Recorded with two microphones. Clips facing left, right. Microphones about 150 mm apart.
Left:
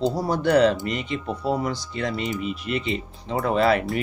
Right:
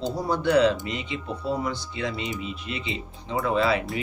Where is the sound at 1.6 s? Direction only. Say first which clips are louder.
Left 2 dB; 40° left (ahead or behind).